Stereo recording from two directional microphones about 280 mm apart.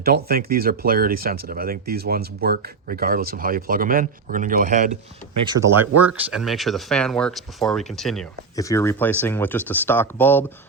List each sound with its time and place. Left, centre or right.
0.0 s speech: right
5.5 s speech: centre